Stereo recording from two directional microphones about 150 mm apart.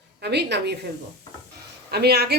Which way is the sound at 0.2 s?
90° right.